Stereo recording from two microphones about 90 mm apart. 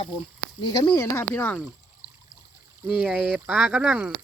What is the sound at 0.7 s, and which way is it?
Speech, 45° left (ahead or behind).